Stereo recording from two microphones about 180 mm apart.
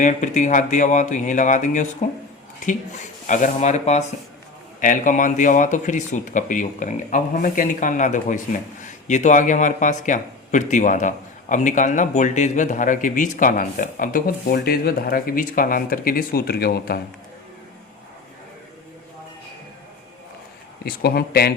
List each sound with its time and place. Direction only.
0.0 s speech: 45° left (ahead or behind)
20.8 s speech: 60° left (ahead or behind)